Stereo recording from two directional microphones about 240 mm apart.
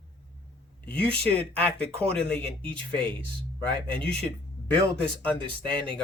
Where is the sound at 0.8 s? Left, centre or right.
Centre.